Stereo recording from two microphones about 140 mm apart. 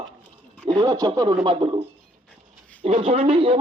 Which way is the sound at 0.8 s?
25° right (ahead or behind).